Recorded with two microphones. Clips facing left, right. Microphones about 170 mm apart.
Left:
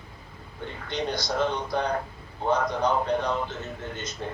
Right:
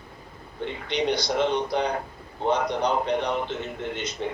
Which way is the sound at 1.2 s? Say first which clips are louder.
Right 3 dB; 20° right (ahead or behind).